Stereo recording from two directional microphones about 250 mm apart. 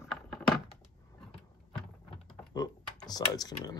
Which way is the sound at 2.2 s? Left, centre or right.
Centre.